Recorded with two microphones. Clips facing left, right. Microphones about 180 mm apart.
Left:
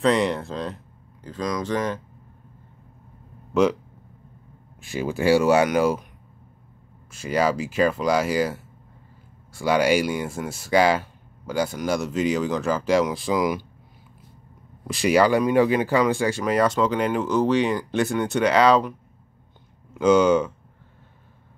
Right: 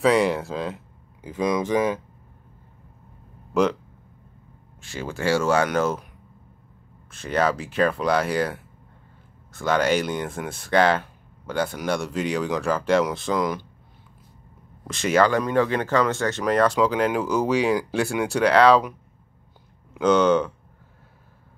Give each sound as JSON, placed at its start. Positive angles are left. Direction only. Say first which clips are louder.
{"t": 0.0, "sound": "speech", "louder": "right 1 dB", "side_deg": -5}
{"t": 3.5, "sound": "speech", "louder": "left 1 dB", "side_deg": 0}
{"t": 4.8, "sound": "speech", "louder": "left 4 dB", "side_deg": 15}
{"t": 7.2, "sound": "speech", "louder": "left 1 dB", "side_deg": 5}
{"t": 15.0, "sound": "speech", "louder": "left 2 dB", "side_deg": 10}
{"t": 19.9, "sound": "speech", "louder": "left 1 dB", "side_deg": 5}